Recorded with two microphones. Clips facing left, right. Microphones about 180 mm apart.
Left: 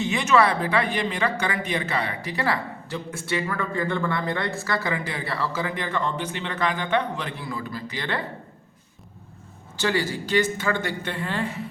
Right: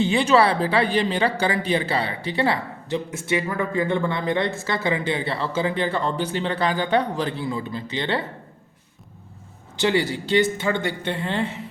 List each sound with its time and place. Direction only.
0.0 s a woman's voice: 30° right (ahead or behind)
9.7 s a woman's voice: 20° right (ahead or behind)